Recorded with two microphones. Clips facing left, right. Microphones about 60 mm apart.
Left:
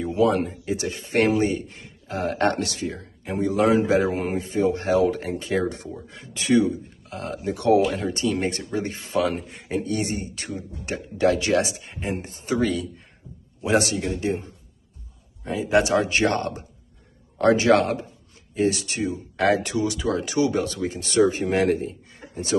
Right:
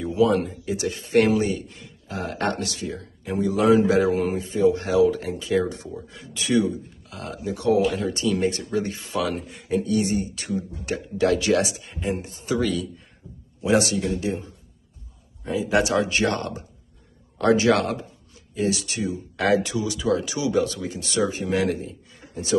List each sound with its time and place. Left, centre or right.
0.1 s speech: left
7.5 s speech: left
7.9 s speech: left